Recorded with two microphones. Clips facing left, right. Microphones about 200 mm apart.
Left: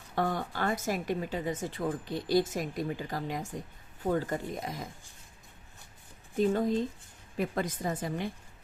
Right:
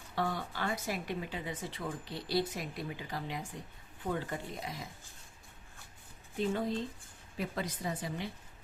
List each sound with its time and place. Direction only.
0.2 s speech: 45° left (ahead or behind)
6.3 s speech: 45° left (ahead or behind)